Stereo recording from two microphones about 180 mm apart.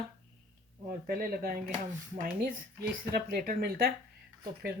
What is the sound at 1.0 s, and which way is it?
Speech, 55° right (ahead or behind).